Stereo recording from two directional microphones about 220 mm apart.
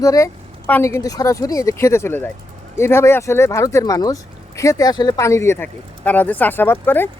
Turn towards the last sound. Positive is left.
turn(degrees=10)  # may be behind; listen again after turning